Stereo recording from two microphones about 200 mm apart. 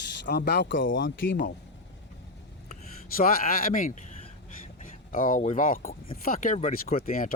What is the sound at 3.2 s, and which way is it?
Speech, 45° left (ahead or behind).